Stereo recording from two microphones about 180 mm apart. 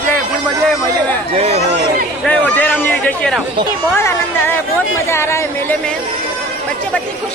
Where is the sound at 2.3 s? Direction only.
10° left (ahead or behind).